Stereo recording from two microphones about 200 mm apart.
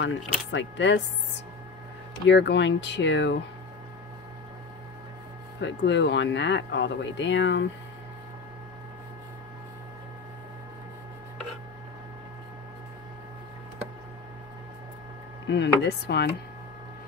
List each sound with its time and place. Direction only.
0.0 s speech: 65° left (ahead or behind)
2.2 s speech: 60° left (ahead or behind)
5.6 s speech: 60° left (ahead or behind)
15.4 s speech: 60° left (ahead or behind)